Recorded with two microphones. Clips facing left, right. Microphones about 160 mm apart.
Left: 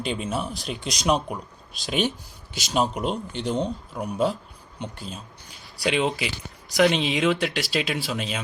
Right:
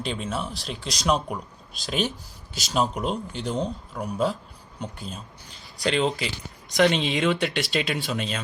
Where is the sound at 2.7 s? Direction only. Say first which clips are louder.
Left 1 dB; centre (ahead or behind).